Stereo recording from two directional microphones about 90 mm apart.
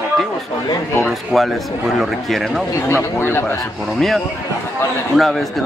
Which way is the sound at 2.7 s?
30° left (ahead or behind).